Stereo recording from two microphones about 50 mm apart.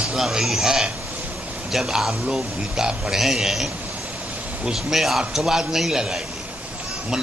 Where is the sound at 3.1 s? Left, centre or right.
Centre.